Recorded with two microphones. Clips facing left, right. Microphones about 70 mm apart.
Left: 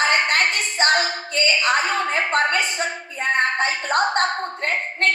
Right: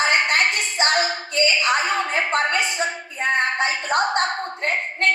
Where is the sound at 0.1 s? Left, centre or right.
Left.